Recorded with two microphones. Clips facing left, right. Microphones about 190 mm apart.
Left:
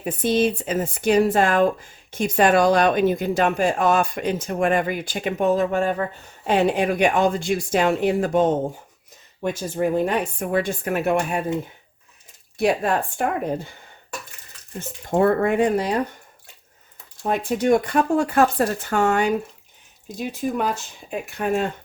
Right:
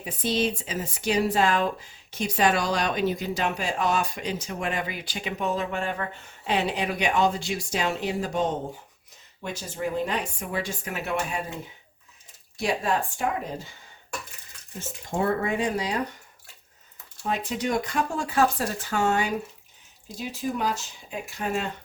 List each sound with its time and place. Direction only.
0.0 s speech: 55° left (ahead or behind)
12.5 s speech: 60° left (ahead or behind)
14.8 s speech: 60° left (ahead or behind)
17.2 s speech: 55° left (ahead or behind)